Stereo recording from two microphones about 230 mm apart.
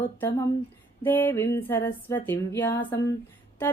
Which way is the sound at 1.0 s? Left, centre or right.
Centre.